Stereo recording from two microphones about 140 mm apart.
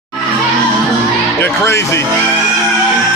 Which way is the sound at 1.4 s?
15° left (ahead or behind).